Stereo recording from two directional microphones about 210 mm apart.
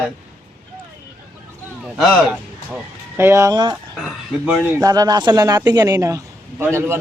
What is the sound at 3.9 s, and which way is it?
Speech, centre (ahead or behind).